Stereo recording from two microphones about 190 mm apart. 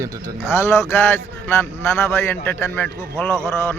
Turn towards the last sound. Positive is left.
turn(degrees=15)  # may be behind; listen again after turning